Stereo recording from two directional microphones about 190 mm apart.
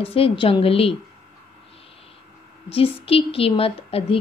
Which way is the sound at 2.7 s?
30° left (ahead or behind).